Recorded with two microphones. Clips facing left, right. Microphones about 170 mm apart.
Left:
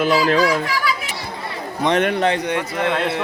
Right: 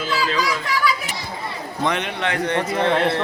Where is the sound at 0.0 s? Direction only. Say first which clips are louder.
Left 7 dB; 70° left (ahead or behind).